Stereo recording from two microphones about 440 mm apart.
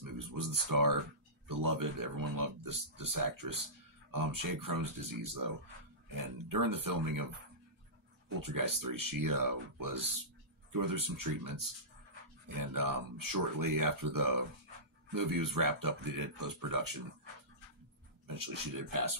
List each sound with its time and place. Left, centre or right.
0.0 s a sound: right
1.5 s speech: right
8.4 s speech: right
18.2 s speech: right